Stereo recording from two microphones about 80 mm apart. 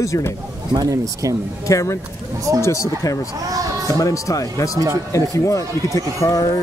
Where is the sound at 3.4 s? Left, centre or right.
Right.